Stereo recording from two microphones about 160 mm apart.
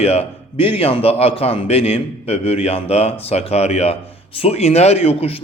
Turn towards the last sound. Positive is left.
turn(degrees=40)  # may be behind; listen again after turning